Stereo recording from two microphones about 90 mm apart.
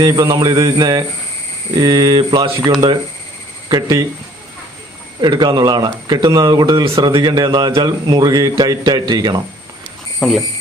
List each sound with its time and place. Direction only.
0.0 s a man's voice: 45° right (ahead or behind)
3.7 s a man's voice: 50° right (ahead or behind)
5.2 s a man's voice: 50° right (ahead or behind)
10.2 s speech: centre (ahead or behind)